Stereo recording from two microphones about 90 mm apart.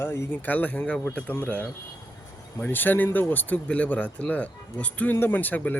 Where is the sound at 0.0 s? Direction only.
30° left (ahead or behind).